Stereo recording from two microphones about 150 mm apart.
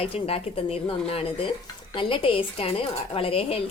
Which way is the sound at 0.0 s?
40° left (ahead or behind).